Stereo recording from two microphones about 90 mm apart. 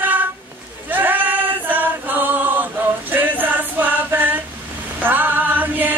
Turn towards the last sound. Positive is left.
turn(degrees=-20)  # may be behind; listen again after turning